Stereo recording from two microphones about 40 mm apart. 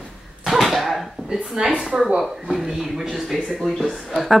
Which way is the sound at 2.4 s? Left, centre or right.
Centre.